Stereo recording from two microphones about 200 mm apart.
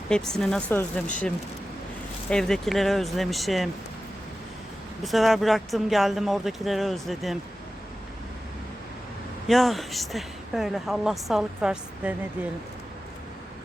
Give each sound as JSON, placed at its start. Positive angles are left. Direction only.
{"t": 0.1, "sound": "a woman's voice", "side_deg": 5}
{"t": 2.3, "sound": "a woman's voice", "side_deg": 0}
{"t": 5.0, "sound": "a woman's voice", "side_deg": 0}
{"t": 9.5, "sound": "a woman's voice", "side_deg": 0}